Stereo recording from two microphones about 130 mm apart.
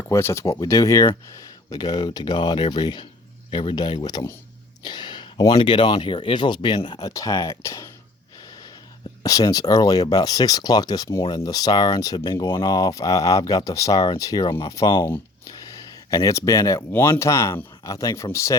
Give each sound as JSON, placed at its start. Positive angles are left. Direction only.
{"t": 0.0, "sound": "speech", "side_deg": 20}
{"t": 4.8, "sound": "a sound", "side_deg": 35}
{"t": 5.5, "sound": "speech", "side_deg": 40}
{"t": 7.1, "sound": "speech", "side_deg": 25}
{"t": 9.2, "sound": "speech", "side_deg": 25}
{"t": 16.0, "sound": "speech", "side_deg": 25}